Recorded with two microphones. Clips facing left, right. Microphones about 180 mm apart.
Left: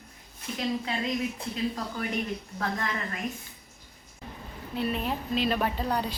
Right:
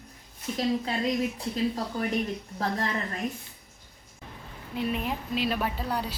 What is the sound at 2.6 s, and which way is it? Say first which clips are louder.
Speech: right 3 dB; 35° right (ahead or behind).